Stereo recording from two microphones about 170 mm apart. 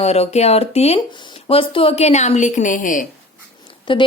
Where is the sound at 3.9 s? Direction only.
30° left (ahead or behind).